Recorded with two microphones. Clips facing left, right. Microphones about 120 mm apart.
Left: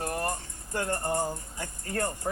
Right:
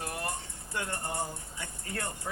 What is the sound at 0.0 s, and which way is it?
Speech, 45° left (ahead or behind).